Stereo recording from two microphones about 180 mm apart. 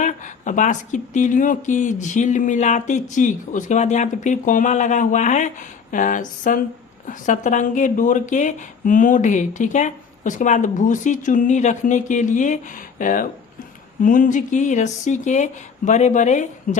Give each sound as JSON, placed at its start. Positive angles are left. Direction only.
{"t": 0.0, "sound": "speech", "side_deg": 45}